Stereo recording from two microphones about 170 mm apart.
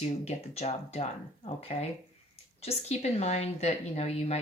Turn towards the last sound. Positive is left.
turn(degrees=40)  # may be behind; listen again after turning